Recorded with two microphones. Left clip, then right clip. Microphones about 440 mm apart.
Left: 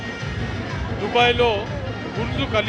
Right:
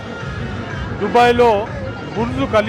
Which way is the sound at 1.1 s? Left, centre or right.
Right.